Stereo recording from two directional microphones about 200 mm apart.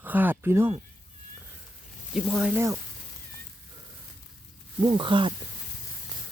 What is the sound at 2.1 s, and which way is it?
Speech, 5° right (ahead or behind).